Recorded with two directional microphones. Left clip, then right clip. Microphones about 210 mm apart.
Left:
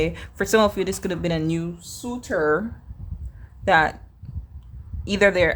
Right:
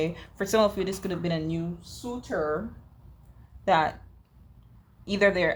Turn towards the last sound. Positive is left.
turn(degrees=30)  # may be behind; listen again after turning